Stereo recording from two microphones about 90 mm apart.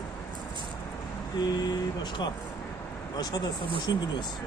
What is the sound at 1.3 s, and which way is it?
Speech, 50° left (ahead or behind).